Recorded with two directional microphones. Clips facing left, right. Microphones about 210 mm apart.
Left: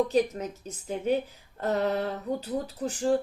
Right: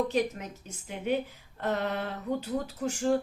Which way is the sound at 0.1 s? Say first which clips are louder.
Left 4 dB; 35° left (ahead or behind).